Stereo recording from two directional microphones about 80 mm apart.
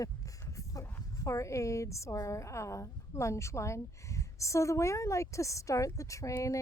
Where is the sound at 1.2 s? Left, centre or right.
Left.